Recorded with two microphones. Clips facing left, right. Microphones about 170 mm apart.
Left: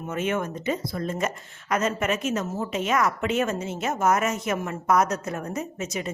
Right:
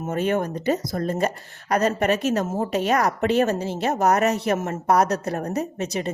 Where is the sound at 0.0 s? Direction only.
40° right (ahead or behind).